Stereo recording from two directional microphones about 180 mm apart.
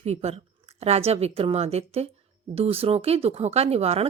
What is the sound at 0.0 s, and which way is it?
Speech, 35° right (ahead or behind).